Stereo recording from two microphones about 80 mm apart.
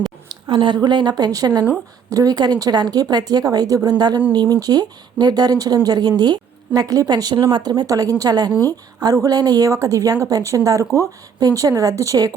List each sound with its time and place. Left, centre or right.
0.4 s speech: right